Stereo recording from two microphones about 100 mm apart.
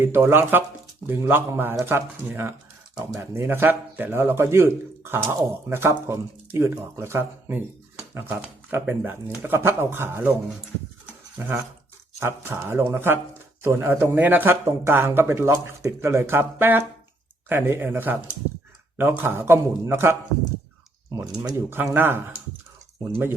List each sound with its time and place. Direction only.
0.0 s speech: 25° right (ahead or behind)
11.3 s speech: 20° right (ahead or behind)
21.1 s speech: 40° right (ahead or behind)
21.7 s speech: 20° right (ahead or behind)